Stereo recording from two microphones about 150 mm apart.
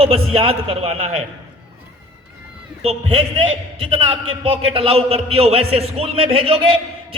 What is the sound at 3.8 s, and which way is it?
A man's voice, 35° right (ahead or behind).